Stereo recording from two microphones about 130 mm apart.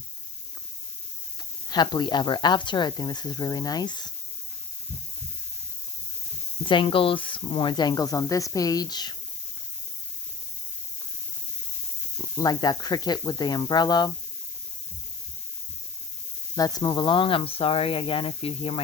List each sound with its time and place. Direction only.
1.7 s speech: 35° left (ahead or behind)
6.6 s speech: 40° left (ahead or behind)
12.1 s speech: 30° left (ahead or behind)
16.6 s speech: 30° left (ahead or behind); by 18.8 s 50° left (ahead or behind)